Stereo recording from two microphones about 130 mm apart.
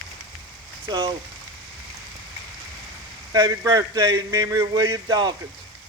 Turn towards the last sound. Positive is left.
turn(degrees=-30)  # may be behind; listen again after turning